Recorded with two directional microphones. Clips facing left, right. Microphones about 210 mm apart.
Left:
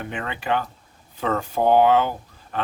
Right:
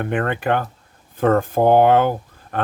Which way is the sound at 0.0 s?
55° right (ahead or behind).